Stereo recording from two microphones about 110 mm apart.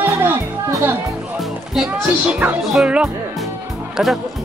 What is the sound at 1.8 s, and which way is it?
A child's voice, 5° right (ahead or behind).